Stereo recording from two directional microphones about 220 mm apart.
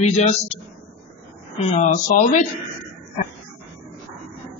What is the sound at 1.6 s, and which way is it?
Speech, 30° left (ahead or behind).